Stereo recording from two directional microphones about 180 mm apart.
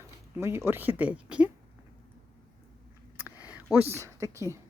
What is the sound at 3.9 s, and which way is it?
Speech, 15° right (ahead or behind).